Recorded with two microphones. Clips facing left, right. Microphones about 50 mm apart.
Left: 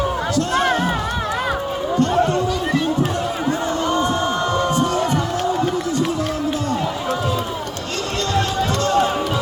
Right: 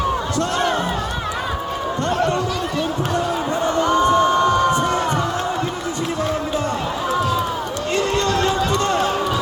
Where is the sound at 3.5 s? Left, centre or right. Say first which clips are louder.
Right 2 dB; right.